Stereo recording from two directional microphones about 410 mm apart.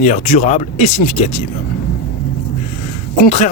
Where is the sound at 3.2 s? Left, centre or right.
Centre.